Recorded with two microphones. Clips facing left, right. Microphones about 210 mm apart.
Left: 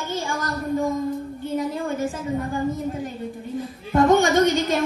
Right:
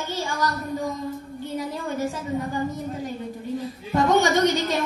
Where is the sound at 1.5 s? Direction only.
50° left (ahead or behind).